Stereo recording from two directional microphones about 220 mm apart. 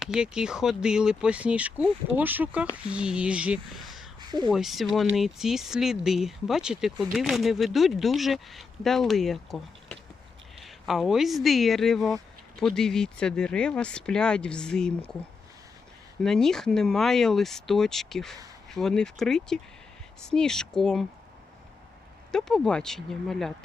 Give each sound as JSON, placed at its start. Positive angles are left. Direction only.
{"t": 0.0, "sound": "speech", "side_deg": -5}
{"t": 4.3, "sound": "speech", "side_deg": -20}
{"t": 4.5, "sound": "speech", "side_deg": 0}
{"t": 10.6, "sound": "a sound", "side_deg": 0}
{"t": 11.4, "sound": "speech", "side_deg": 0}
{"t": 16.2, "sound": "speech", "side_deg": 0}
{"t": 22.3, "sound": "speech", "side_deg": 0}